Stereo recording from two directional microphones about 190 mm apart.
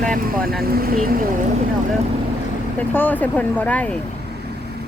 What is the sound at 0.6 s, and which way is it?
Speech, 50° right (ahead or behind).